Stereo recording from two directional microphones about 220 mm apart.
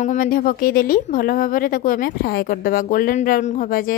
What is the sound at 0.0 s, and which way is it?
Speech, 35° left (ahead or behind).